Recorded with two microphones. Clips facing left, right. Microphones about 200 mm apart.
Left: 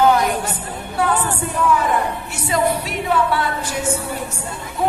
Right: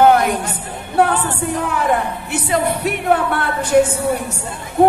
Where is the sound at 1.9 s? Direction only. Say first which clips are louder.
Right 3 dB; 60° right (ahead or behind).